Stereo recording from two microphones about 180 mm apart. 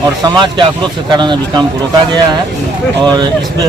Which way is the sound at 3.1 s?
25° right (ahead or behind).